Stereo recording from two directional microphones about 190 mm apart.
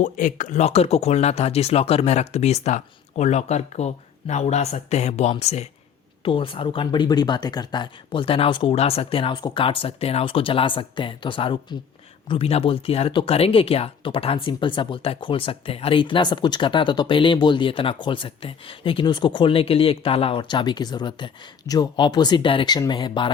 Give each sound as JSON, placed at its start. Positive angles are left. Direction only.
{"t": 0.0, "sound": "speech", "side_deg": 45}